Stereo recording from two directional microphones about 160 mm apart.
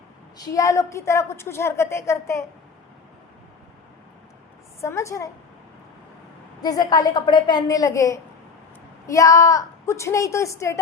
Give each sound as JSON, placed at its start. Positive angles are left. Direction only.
{"t": 0.3, "sound": "a woman's voice", "side_deg": 20}
{"t": 4.8, "sound": "a woman's voice", "side_deg": 20}
{"t": 6.6, "sound": "a woman's voice", "side_deg": 25}